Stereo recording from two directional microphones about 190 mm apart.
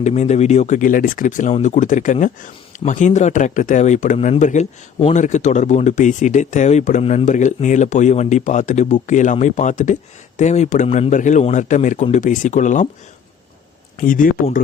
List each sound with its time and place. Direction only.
0.0 s speech: 35° left (ahead or behind)
14.0 s speech: 45° left (ahead or behind)